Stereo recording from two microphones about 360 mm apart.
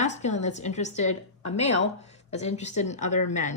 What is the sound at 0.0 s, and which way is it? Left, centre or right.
Speech, centre.